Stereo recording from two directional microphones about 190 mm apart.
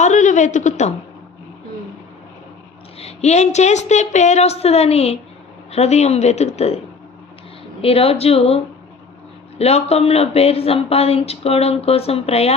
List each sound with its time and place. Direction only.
0.0 s a woman's voice: 40° left (ahead or behind)
3.0 s speech: 35° left (ahead or behind)
7.8 s speech: 30° left (ahead or behind)